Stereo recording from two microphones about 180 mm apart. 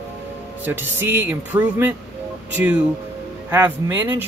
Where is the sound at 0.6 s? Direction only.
10° right (ahead or behind).